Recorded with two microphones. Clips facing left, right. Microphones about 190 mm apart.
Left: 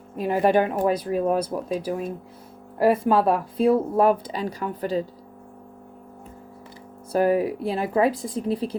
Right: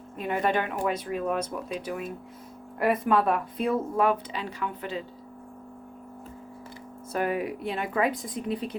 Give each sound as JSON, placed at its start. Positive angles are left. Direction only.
{"t": 0.2, "sound": "speech", "side_deg": 35}
{"t": 7.1, "sound": "speech", "side_deg": 35}